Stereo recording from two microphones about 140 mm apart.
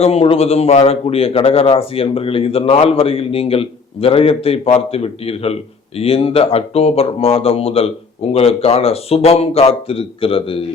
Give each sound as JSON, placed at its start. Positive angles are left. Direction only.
{"t": 0.0, "sound": "speech", "side_deg": 45}